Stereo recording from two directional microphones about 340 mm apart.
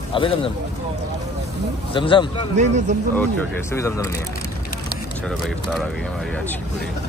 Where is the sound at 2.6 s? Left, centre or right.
Right.